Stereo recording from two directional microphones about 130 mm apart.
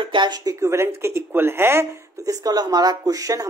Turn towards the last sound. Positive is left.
turn(degrees=-25)  # may be behind; listen again after turning